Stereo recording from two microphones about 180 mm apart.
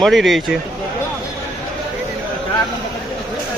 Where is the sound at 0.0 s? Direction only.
Centre (ahead or behind).